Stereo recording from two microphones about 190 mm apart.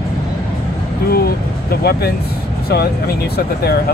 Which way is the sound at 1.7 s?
55° left (ahead or behind).